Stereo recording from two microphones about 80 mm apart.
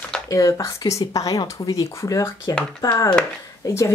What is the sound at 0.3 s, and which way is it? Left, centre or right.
Speech, left.